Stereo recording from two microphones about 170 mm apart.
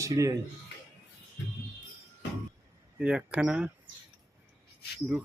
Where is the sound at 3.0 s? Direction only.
5° right (ahead or behind).